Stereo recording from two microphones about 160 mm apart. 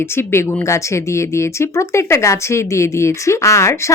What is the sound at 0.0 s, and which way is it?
Speech, 15° left (ahead or behind).